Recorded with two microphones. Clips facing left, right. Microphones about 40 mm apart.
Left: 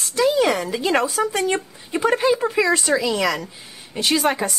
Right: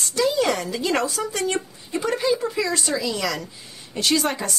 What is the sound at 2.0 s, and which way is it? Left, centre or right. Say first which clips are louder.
A woman's voice: left 4 dB; left.